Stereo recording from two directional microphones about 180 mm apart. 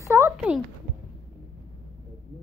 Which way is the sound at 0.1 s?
15° right (ahead or behind).